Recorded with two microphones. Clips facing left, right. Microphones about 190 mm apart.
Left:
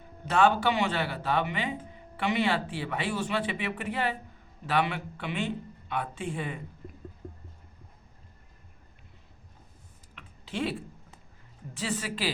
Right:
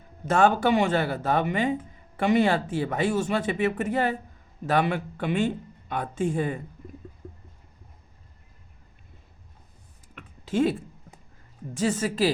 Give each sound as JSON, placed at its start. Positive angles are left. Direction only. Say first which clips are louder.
{"t": 0.3, "sound": "speech", "louder": "right 3 dB", "side_deg": -45}
{"t": 10.2, "sound": "a sound", "louder": "right 9 dB", "side_deg": -45}
{"t": 11.7, "sound": "speech", "louder": "right 8 dB", "side_deg": -45}